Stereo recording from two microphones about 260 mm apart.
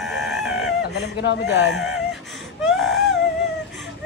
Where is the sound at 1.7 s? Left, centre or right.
Centre.